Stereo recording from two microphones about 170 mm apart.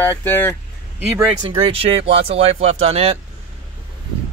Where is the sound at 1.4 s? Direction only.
35° right (ahead or behind).